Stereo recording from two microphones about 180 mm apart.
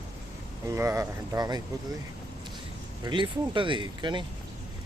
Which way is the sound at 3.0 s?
25° right (ahead or behind).